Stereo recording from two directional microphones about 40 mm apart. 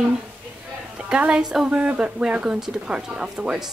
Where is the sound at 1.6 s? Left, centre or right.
Right.